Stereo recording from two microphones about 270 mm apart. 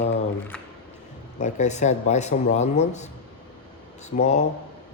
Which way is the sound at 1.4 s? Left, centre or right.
Left.